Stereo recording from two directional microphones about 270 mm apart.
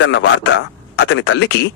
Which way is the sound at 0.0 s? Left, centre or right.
Left.